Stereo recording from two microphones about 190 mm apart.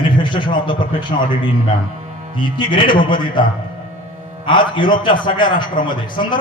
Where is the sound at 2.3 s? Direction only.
25° left (ahead or behind).